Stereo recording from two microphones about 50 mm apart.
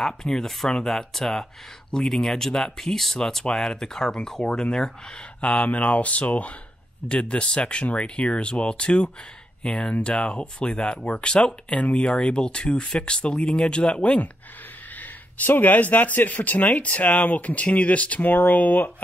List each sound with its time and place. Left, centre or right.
0.0 s speech: centre
5.4 s speech: left
15.0 s speech: left